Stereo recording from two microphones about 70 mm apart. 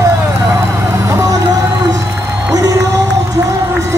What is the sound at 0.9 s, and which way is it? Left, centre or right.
Vehicle, right.